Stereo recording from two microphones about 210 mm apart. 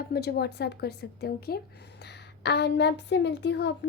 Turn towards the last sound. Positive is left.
turn(degrees=55)  # may be behind; listen again after turning